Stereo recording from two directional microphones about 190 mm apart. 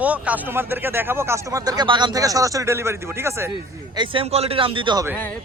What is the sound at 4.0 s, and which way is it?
A man's voice, 30° right (ahead or behind).